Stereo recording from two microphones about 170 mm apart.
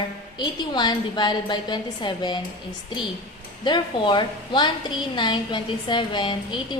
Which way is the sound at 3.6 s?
25° left (ahead or behind).